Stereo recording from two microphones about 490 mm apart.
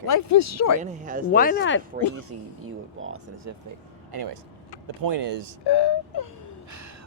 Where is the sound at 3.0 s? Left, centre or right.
Right.